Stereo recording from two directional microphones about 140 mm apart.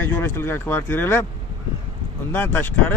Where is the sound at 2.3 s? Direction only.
15° left (ahead or behind).